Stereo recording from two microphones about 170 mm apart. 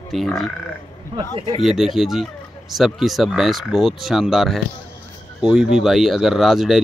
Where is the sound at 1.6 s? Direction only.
Centre (ahead or behind).